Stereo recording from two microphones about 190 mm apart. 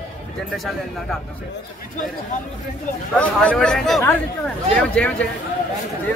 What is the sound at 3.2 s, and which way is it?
Speech, 5° left (ahead or behind).